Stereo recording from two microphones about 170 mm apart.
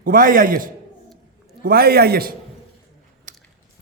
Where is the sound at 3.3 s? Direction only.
50° right (ahead or behind).